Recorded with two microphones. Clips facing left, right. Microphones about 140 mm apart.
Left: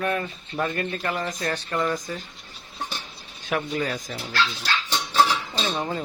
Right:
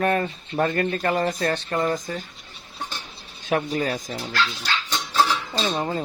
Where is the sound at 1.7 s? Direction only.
45° right (ahead or behind).